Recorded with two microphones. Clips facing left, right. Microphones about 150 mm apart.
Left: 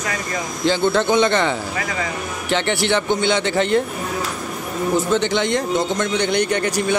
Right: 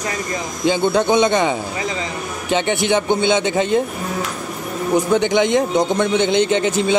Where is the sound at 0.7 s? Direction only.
15° right (ahead or behind).